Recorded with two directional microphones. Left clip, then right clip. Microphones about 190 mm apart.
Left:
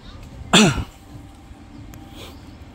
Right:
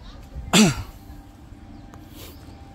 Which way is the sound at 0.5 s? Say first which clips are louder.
Left 4 dB; centre (ahead or behind).